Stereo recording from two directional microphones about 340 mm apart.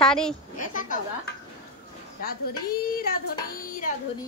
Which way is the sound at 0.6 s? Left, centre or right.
Left.